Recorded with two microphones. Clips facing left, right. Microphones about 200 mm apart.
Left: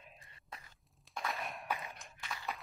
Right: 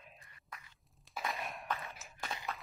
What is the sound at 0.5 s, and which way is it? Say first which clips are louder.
Walk: left 1 dB; 30° left (ahead or behind).